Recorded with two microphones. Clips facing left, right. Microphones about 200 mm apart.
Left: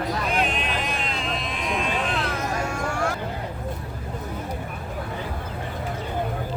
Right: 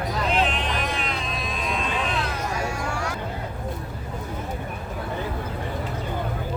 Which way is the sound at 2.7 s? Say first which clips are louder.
Left 3 dB; 50° left (ahead or behind).